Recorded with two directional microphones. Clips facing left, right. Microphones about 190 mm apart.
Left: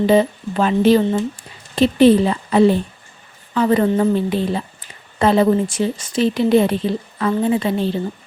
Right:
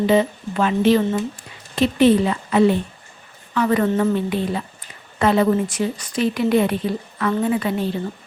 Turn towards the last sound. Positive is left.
turn(degrees=30)  # may be behind; listen again after turning